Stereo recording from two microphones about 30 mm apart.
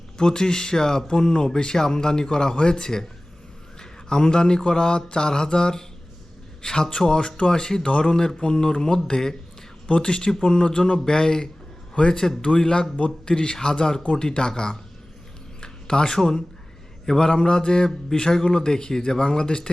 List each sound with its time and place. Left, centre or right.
0.2 s speech: left
9.9 s speech: left
10.2 s speech: left